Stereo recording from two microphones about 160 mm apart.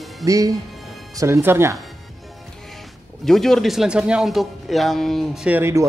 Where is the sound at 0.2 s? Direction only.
20° right (ahead or behind).